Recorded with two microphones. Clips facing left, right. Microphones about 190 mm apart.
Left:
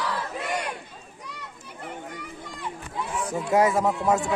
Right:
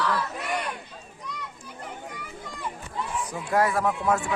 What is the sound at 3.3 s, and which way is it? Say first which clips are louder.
Speech: left 4 dB; 20° left (ahead or behind).